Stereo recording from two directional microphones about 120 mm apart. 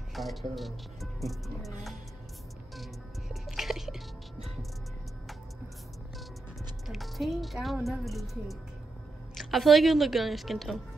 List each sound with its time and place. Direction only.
0.1 s speech: centre (ahead or behind)
2.8 s music: centre (ahead or behind)
6.9 s speech: centre (ahead or behind)